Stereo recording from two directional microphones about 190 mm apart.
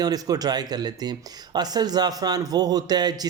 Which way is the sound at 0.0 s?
20° right (ahead or behind).